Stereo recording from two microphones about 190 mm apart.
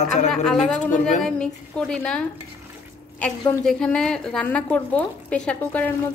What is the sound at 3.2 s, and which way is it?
A woman's voice, 5° left (ahead or behind).